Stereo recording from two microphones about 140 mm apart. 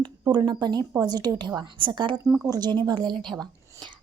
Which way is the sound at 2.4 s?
30° right (ahead or behind).